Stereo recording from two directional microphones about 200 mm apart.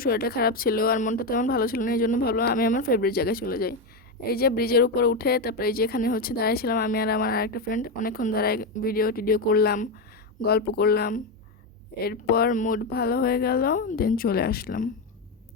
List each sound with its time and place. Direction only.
0.0 s speech: 50° left (ahead or behind)